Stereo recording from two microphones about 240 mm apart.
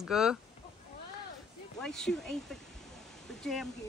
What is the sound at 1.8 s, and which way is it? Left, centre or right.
Speech, centre.